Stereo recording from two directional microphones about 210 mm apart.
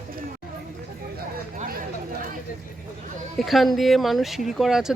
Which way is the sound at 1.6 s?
45° right (ahead or behind).